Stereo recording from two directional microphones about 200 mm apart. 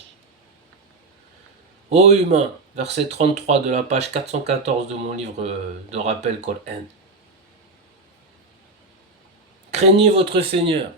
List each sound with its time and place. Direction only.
1.9 s speech: 35° right (ahead or behind)
9.7 s speech: 30° right (ahead or behind)